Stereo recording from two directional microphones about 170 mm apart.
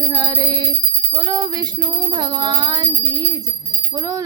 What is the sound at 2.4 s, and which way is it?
Music, 25° right (ahead or behind).